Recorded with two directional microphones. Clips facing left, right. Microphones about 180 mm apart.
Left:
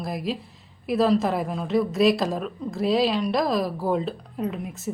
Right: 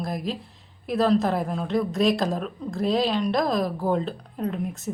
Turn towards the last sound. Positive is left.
turn(degrees=0)  # may be behind; listen again after turning